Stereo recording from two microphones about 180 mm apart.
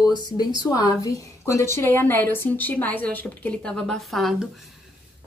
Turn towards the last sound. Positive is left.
turn(degrees=0)  # may be behind; listen again after turning